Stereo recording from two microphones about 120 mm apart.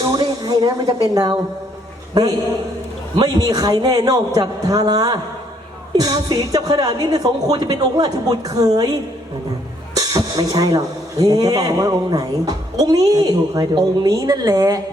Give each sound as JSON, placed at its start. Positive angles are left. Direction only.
{"t": 0.0, "sound": "speech", "side_deg": -35}
{"t": 3.4, "sound": "speech", "side_deg": -30}
{"t": 9.9, "sound": "speech", "side_deg": -30}